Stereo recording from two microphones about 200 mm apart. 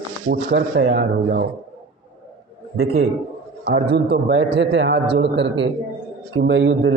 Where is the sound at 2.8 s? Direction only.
50° right (ahead or behind).